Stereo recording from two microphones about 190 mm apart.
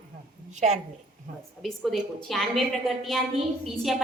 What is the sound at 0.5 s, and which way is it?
Speech, 35° right (ahead or behind).